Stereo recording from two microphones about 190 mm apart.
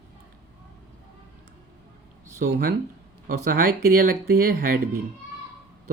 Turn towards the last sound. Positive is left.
turn(degrees=-50)  # may be behind; listen again after turning